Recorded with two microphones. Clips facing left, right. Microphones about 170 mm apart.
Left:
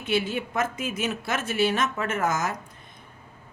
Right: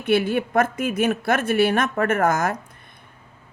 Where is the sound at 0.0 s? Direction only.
55° right (ahead or behind).